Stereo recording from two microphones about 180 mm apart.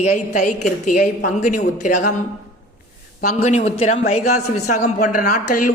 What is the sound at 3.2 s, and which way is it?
A woman's voice, 40° left (ahead or behind).